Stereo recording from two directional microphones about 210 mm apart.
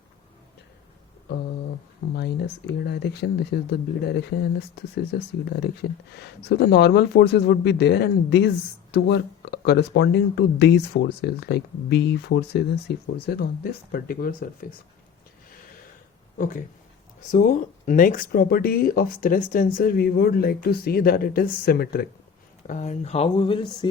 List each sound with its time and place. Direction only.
2.8 s speech: 55° left (ahead or behind)
16.4 s speech: 40° left (ahead or behind)
22.6 s speech: 35° left (ahead or behind)